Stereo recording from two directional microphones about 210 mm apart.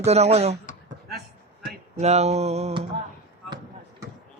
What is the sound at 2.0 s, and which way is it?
Speech, 30° right (ahead or behind).